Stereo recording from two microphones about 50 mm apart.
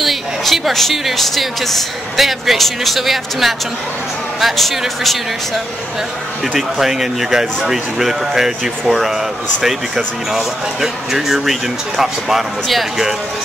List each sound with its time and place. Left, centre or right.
0.0 s speech: centre
6.5 s speech: centre